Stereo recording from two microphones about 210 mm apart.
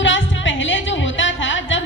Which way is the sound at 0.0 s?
60° left (ahead or behind).